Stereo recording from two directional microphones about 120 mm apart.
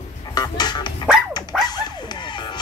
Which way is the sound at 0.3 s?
35° left (ahead or behind).